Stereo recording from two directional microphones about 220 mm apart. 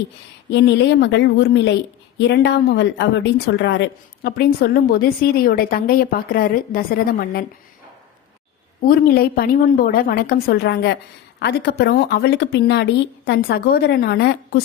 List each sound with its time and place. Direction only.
0.5 s a woman's voice: 50° left (ahead or behind)
8.8 s a woman's voice: 40° left (ahead or behind)